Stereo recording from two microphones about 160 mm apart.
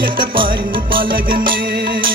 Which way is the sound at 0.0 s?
30° right (ahead or behind).